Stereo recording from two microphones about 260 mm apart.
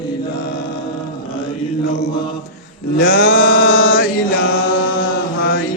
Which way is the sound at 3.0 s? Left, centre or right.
Left.